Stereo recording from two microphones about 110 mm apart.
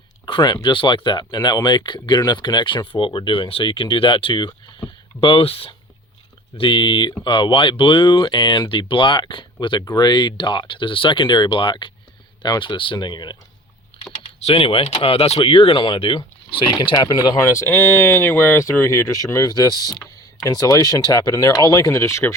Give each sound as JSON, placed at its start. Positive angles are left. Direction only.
{"t": 0.3, "sound": "speech", "side_deg": 45}
{"t": 6.6, "sound": "speech", "side_deg": 50}
{"t": 13.9, "sound": "typing", "side_deg": 55}
{"t": 14.3, "sound": "speech", "side_deg": 65}
{"t": 17.4, "sound": "speech", "side_deg": 25}